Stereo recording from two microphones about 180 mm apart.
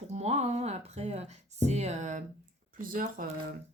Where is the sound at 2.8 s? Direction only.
50° right (ahead or behind).